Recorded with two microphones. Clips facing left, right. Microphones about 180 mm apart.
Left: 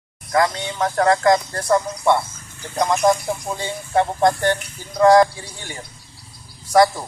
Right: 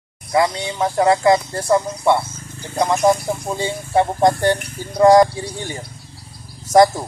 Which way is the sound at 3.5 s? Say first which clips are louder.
Right 3 dB; 10° right (ahead or behind).